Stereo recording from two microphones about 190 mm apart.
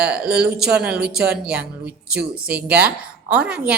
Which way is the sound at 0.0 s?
5° right (ahead or behind).